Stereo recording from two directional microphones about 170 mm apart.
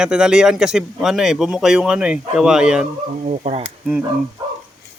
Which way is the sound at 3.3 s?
40° right (ahead or behind).